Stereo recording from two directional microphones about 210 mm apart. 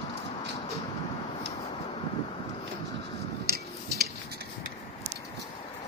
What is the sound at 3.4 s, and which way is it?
Tick-tock, 45° right (ahead or behind).